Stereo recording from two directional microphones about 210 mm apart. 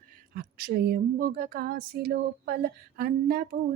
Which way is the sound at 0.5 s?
45° right (ahead or behind).